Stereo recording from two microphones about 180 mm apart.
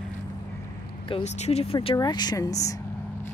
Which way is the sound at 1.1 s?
35° left (ahead or behind).